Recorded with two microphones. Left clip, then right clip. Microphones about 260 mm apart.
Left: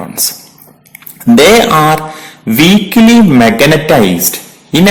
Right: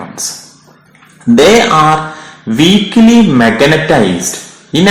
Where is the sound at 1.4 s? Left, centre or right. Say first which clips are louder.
Left 1 dB; left.